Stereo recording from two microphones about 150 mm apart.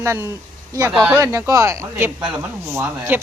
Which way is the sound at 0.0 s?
20° right (ahead or behind).